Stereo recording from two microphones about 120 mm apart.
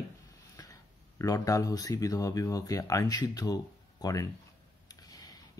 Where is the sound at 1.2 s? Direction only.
30° left (ahead or behind).